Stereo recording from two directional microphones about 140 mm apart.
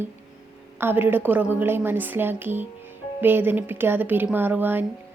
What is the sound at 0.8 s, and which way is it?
A woman's voice, 15° right (ahead or behind).